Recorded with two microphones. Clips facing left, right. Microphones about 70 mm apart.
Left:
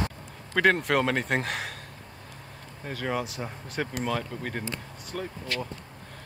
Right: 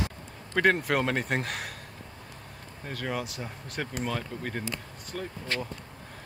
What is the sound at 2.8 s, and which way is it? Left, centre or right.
Speech, centre.